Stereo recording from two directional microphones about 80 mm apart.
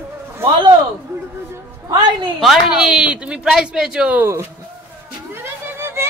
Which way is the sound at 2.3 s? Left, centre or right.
Centre.